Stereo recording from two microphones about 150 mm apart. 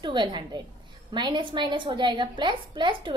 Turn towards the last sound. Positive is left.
turn(degrees=-30)  # may be behind; listen again after turning